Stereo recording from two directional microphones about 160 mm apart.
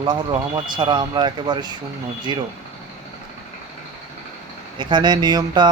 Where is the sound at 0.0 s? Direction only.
30° right (ahead or behind).